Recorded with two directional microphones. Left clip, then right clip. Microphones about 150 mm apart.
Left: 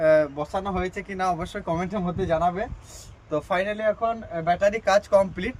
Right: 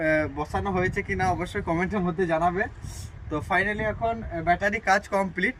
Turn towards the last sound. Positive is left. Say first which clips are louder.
# left 4 dB
turn(degrees=20)  # may be behind; listen again after turning